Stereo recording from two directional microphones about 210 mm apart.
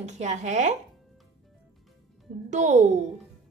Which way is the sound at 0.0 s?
35° right (ahead or behind).